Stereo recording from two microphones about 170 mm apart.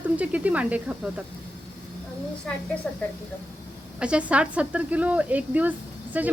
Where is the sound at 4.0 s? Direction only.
5° right (ahead or behind).